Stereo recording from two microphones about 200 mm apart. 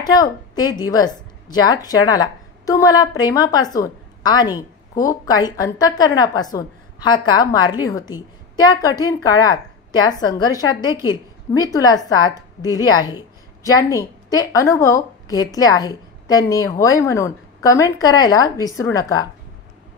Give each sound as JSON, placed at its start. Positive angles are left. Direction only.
{"t": 0.0, "sound": "a woman's voice", "side_deg": 20}